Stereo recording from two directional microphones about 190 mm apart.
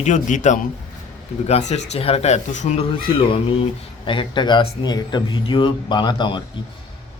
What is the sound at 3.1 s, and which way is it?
Speech, 25° left (ahead or behind).